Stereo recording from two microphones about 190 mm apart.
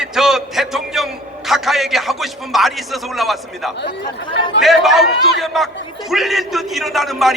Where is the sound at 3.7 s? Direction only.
65° left (ahead or behind).